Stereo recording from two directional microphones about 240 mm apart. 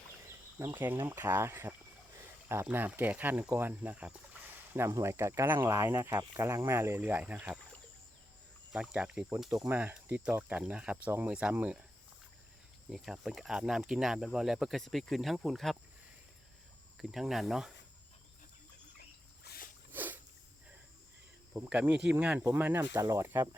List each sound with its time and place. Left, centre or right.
0.6 s speech: centre
8.7 s speech: centre
12.9 s speech: centre
17.0 s speech: centre
19.5 s a sound: left
19.9 s a sound: centre
21.5 s speech: centre